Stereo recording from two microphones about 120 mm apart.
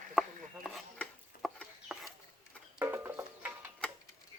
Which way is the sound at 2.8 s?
20° right (ahead or behind).